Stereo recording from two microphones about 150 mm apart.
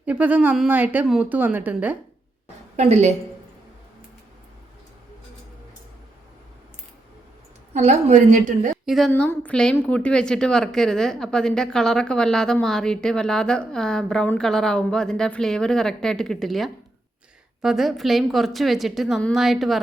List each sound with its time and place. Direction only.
0.0 s speech: 10° right (ahead or behind)
2.7 s a woman's voice: 50° right (ahead or behind)
7.7 s a woman's voice: 50° right (ahead or behind)
8.9 s a woman's voice: 5° left (ahead or behind)